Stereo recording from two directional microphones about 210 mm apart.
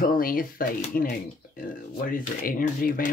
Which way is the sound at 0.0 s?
40° left (ahead or behind).